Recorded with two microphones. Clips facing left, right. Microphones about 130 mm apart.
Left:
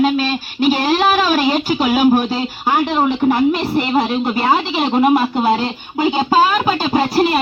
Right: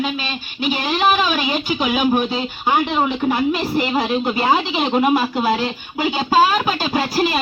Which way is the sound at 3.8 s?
30° left (ahead or behind).